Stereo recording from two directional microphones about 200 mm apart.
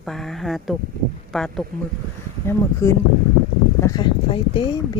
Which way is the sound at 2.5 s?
15° left (ahead or behind).